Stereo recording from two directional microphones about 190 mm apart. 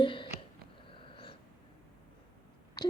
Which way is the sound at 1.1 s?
25° left (ahead or behind).